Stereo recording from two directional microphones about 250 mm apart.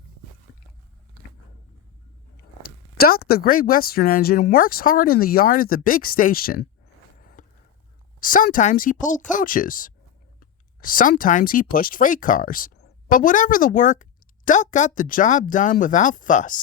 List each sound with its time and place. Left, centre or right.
2.6 s speech: left
7.2 s a sound: left
8.2 s speech: left